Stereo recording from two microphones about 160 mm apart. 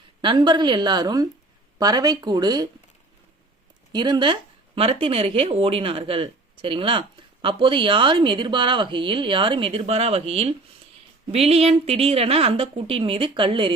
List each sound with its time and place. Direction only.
0.2 s a woman's voice: 30° right (ahead or behind)
3.9 s speech: 25° right (ahead or behind)